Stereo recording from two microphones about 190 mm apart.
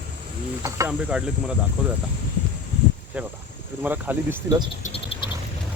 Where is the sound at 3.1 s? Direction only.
10° right (ahead or behind).